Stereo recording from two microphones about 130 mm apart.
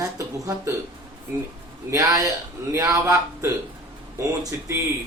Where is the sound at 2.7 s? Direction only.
20° right (ahead or behind).